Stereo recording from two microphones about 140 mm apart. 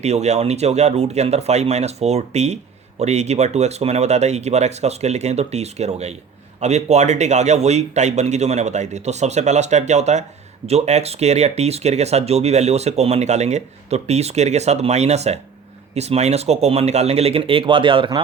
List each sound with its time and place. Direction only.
0.0 s speech: 50° right (ahead or behind); by 18.2 s 35° right (ahead or behind)